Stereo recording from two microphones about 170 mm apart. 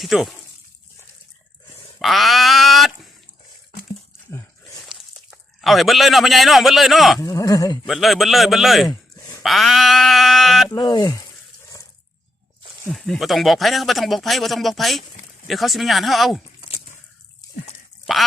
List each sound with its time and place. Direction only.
0.0 s speech: centre (ahead or behind)
2.0 s dog: centre (ahead or behind)
4.9 s a man's voice: centre (ahead or behind)
7.2 s speech: 20° left (ahead or behind)
7.9 s speech: centre (ahead or behind)
8.9 s a sound: 20° left (ahead or behind)
9.4 s speech: centre (ahead or behind)
10.7 s speech: 25° left (ahead or behind)
12.9 s speech: centre (ahead or behind)
18.0 s speech: centre (ahead or behind)